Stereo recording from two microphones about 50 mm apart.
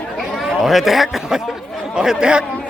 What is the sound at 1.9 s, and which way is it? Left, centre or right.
Speech, centre.